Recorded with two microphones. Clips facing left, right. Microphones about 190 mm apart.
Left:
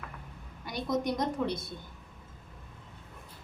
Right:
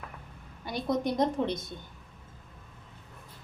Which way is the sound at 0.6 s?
30° right (ahead or behind).